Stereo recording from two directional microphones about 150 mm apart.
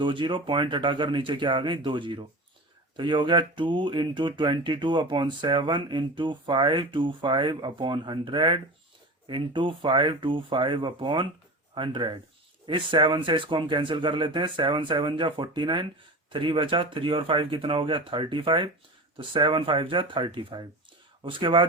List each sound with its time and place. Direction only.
0.0 s speech: 30° right (ahead or behind)